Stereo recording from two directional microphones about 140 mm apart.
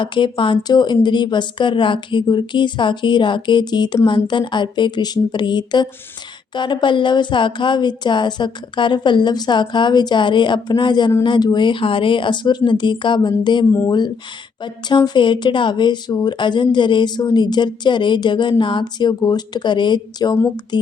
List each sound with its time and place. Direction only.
0.0 s speech: 35° left (ahead or behind)